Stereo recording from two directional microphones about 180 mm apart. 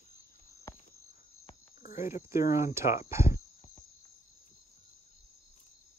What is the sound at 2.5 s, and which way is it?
Speech, 15° right (ahead or behind).